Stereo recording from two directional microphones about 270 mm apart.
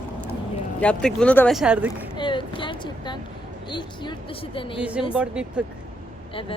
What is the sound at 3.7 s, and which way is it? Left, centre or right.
A woman's voice, centre.